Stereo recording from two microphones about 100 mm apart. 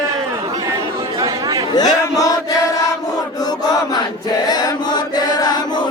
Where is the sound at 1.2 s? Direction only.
40° right (ahead or behind).